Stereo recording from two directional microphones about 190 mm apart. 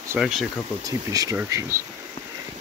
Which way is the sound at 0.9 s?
20° right (ahead or behind).